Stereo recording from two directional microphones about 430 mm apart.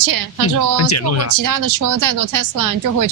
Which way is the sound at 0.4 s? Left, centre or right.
Left.